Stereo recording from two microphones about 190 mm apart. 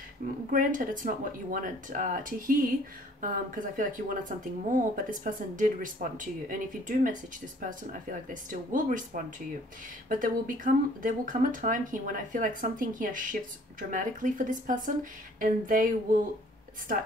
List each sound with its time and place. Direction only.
0.5 s speech: 45° right (ahead or behind)